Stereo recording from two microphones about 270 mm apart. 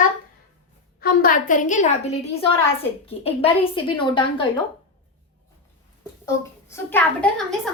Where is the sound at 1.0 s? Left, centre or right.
Left.